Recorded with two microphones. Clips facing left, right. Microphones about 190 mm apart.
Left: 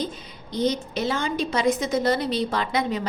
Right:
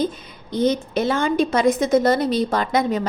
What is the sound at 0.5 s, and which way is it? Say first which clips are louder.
Speech: right 5 dB; 50° right (ahead or behind).